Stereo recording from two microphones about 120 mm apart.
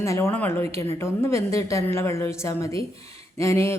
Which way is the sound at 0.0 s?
25° left (ahead or behind).